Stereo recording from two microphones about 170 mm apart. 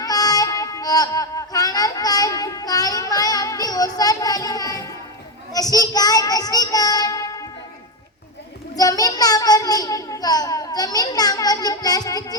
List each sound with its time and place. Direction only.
0.0 s music: 20° left (ahead or behind)
5.5 s a child's voice: 20° left (ahead or behind)
8.7 s a child's voice: 20° left (ahead or behind)